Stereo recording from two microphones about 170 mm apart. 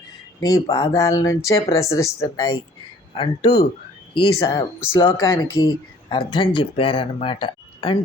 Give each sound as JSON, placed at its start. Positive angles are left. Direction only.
{"t": 0.3, "sound": "speech", "side_deg": 20}
{"t": 3.2, "sound": "speech", "side_deg": 30}